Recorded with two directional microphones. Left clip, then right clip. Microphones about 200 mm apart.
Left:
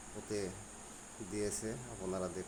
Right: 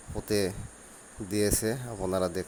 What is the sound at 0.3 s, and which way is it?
Speech, 40° right (ahead or behind).